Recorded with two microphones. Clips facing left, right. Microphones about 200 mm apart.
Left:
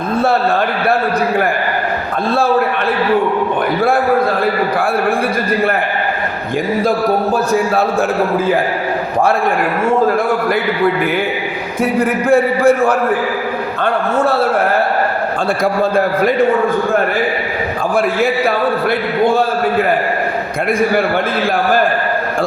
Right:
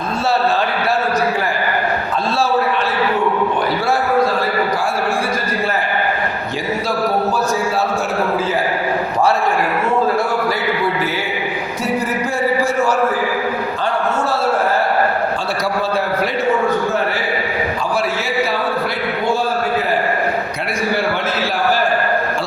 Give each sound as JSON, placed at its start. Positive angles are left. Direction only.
{"t": 11.8, "sound": "a man's voice", "side_deg": 55}
{"t": 15.6, "sound": "a man's voice", "side_deg": 50}
{"t": 17.9, "sound": "a man's voice", "side_deg": 55}